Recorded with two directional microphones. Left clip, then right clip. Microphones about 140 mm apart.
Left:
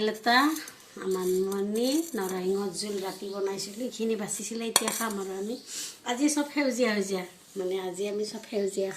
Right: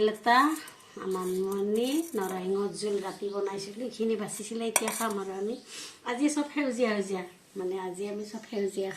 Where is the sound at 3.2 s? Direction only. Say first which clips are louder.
Even; 5° right (ahead or behind).